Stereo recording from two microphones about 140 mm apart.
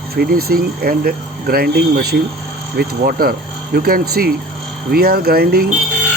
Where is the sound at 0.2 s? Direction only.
90° right.